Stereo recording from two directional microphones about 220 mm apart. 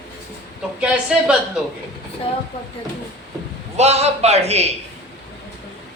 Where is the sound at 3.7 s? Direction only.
30° right (ahead or behind).